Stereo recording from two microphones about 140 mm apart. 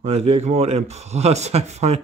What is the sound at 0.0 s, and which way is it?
Speech, 50° right (ahead or behind).